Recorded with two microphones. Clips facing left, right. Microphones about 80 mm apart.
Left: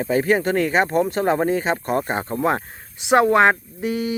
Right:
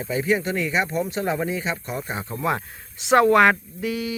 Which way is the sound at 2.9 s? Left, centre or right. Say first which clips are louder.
Left 1 dB; left.